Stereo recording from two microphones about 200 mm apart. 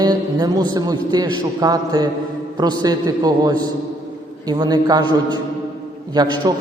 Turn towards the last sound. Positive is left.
turn(degrees=-20)  # may be behind; listen again after turning